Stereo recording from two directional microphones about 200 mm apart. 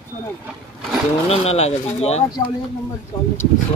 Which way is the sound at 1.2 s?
30° left (ahead or behind).